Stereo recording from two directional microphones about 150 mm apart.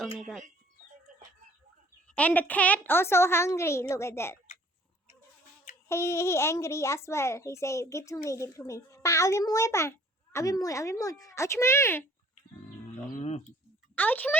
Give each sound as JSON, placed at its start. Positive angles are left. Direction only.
{"t": 2.1, "sound": "a woman's voice", "side_deg": 10}
{"t": 5.9, "sound": "a child's voice", "side_deg": 15}
{"t": 13.1, "sound": "speech", "side_deg": 45}
{"t": 13.9, "sound": "speech", "side_deg": 10}